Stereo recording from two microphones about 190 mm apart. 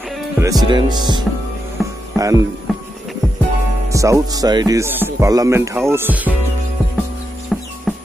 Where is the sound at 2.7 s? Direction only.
Centre (ahead or behind).